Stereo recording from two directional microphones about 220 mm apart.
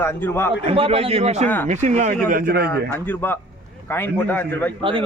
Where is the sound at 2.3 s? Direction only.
45° right (ahead or behind).